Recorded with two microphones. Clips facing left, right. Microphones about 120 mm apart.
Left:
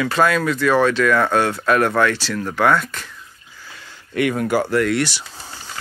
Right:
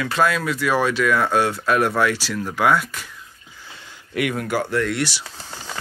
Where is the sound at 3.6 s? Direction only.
20° right (ahead or behind).